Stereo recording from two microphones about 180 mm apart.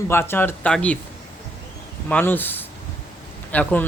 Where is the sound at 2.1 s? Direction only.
10° left (ahead or behind).